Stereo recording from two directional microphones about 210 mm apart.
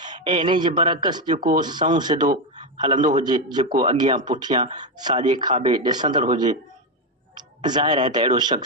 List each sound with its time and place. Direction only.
0.0 s speech: 20° right (ahead or behind)
2.2 s speech: 35° right (ahead or behind)
2.7 s a man's voice: 20° right (ahead or behind)
3.0 s a man's voice: 35° right (ahead or behind)
3.2 s speech: 20° right (ahead or behind)
7.3 s a sound: 20° right (ahead or behind)
8.1 s speech: 20° right (ahead or behind)